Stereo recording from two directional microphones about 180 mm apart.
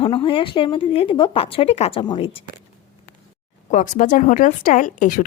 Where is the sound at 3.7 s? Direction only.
45° left (ahead or behind).